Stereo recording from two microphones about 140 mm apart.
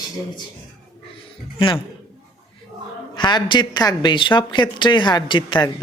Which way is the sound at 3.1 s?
35° left (ahead or behind).